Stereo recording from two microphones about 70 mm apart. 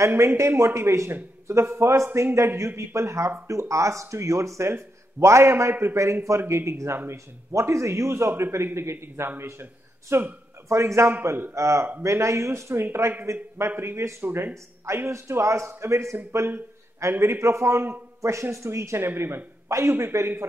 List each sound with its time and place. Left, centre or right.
0.0 s a man's voice: right